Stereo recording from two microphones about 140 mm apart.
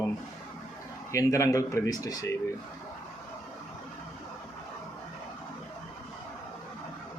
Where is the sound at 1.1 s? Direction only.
20° left (ahead or behind).